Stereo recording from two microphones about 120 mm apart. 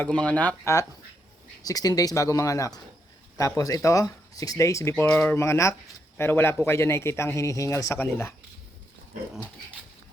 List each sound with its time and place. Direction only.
0.0 s speech: 10° left (ahead or behind)
0.6 s a man's voice: 25° left (ahead or behind)
5.0 s a man's voice: 15° left (ahead or behind)